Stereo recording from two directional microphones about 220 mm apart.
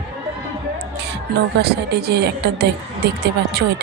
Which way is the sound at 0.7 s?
50° right (ahead or behind).